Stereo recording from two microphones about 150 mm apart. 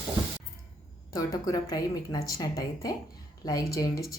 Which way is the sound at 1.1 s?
25° left (ahead or behind).